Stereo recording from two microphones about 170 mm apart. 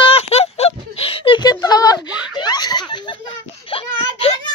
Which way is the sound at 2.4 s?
25° left (ahead or behind).